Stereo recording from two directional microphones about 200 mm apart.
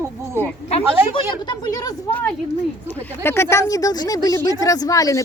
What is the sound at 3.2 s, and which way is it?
A woman's voice, 15° left (ahead or behind).